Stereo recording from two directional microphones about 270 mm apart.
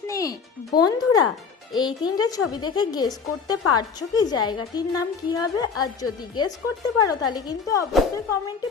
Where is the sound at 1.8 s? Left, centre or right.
Centre.